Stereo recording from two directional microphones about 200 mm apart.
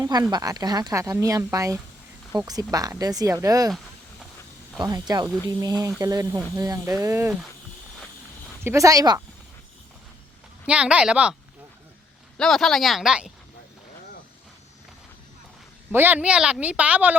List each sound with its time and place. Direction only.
0.0 s speech: 20° right (ahead or behind)
4.8 s speech: 20° right (ahead or behind)
8.6 s speech: 15° right (ahead or behind)
10.7 s speech: 5° right (ahead or behind)
12.4 s speech: centre (ahead or behind)
15.9 s speech: 10° right (ahead or behind)